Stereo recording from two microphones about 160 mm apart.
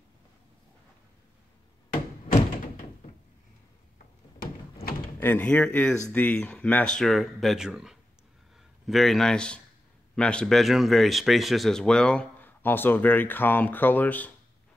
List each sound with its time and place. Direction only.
5.2 s speech: 10° left (ahead or behind)